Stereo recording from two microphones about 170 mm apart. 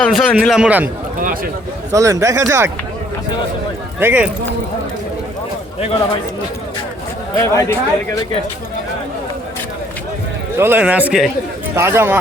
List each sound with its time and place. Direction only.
0.0 s a man's voice: centre (ahead or behind)
1.9 s speech: 20° right (ahead or behind)
4.0 s speech: 10° right (ahead or behind)
7.3 s speech: 20° left (ahead or behind)
10.6 s speech: 10° right (ahead or behind)